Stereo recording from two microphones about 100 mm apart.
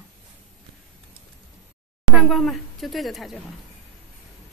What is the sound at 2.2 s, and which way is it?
A woman's voice, centre (ahead or behind).